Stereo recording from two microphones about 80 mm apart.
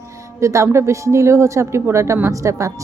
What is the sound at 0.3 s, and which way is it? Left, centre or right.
Speech, right.